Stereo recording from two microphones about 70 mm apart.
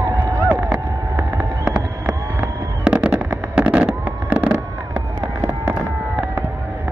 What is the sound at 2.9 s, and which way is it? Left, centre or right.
Fireworks, right.